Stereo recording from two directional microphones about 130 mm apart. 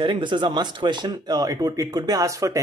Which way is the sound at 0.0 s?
40° right (ahead or behind).